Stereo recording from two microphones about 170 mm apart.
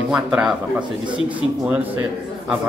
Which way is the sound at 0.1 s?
5° right (ahead or behind).